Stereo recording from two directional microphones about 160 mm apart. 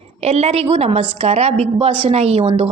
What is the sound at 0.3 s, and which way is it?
A woman's voice, 40° right (ahead or behind).